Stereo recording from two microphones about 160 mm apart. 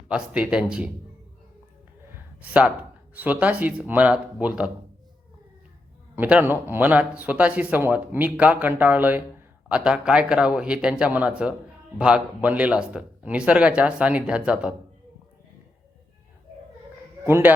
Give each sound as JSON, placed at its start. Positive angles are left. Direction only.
{"t": 0.1, "sound": "speech", "side_deg": -5}
{"t": 2.4, "sound": "speech", "side_deg": -10}
{"t": 6.1, "sound": "speech", "side_deg": -10}
{"t": 17.2, "sound": "speech", "side_deg": -15}